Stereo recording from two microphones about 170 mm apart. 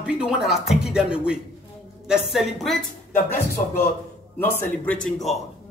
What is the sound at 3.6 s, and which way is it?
Speech, 45° left (ahead or behind).